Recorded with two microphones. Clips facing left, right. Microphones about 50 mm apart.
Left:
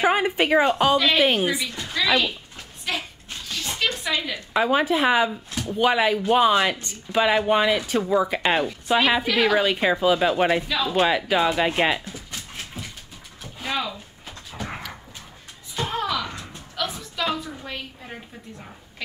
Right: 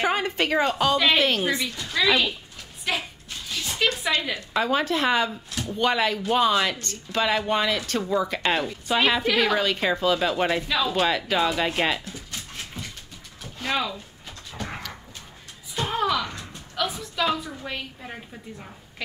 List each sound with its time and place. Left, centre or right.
0.0 s a woman's voice: centre
0.9 s a woman's voice: centre
1.2 s speech: centre
1.7 s a sound: left
2.0 s speech: centre
2.8 s creak: centre
3.7 s a sound: centre
4.6 s a woman's voice: centre
9.6 s speech: centre
12.0 s dog: left
12.5 s a sound: centre
14.5 s horse: centre
15.7 s a sound: centre